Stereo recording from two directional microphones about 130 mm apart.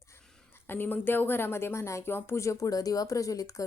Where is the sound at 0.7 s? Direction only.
15° left (ahead or behind).